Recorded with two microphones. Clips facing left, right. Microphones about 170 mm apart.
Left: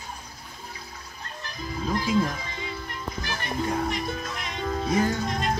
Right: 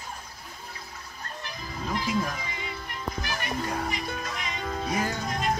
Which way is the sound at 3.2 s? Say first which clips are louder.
Left 1 dB; 15° right (ahead or behind).